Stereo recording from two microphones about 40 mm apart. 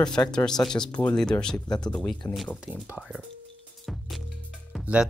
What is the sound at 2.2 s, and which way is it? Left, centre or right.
Speech, left.